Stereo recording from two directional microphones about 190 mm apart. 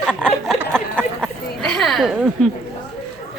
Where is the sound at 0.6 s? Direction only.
10° right (ahead or behind).